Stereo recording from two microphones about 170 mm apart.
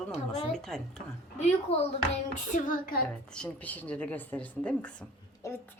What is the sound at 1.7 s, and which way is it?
Speech, 35° left (ahead or behind).